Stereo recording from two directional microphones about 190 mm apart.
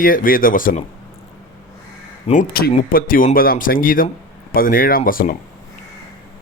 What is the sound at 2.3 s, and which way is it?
Speech, 45° left (ahead or behind).